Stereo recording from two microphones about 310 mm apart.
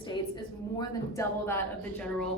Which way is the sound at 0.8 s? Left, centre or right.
Centre.